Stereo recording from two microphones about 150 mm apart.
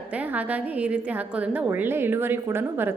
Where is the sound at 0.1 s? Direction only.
10° right (ahead or behind).